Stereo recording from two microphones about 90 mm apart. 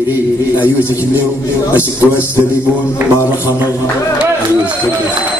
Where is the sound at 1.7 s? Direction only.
20° right (ahead or behind).